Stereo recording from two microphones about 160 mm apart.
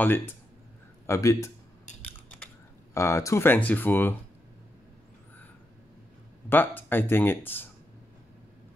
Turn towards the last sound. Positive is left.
turn(degrees=10)  # may be behind; listen again after turning